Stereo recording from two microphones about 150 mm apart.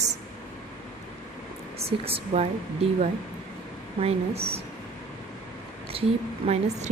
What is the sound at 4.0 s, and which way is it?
Speech, 40° right (ahead or behind).